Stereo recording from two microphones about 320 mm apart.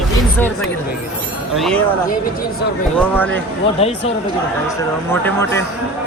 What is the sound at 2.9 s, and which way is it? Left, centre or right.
Speech, centre.